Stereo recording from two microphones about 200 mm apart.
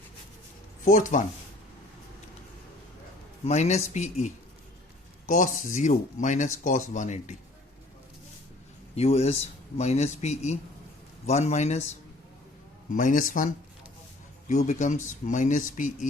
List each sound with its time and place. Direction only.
0.9 s speech: 40° left (ahead or behind)
3.4 s speech: 35° left (ahead or behind)
5.3 s speech: 40° left (ahead or behind)
9.0 s speech: 30° left (ahead or behind)
12.9 s speech: 40° left (ahead or behind)